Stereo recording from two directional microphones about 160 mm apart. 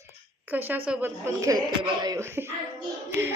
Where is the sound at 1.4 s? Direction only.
20° right (ahead or behind).